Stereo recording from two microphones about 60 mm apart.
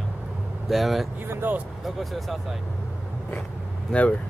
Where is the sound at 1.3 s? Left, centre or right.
Right.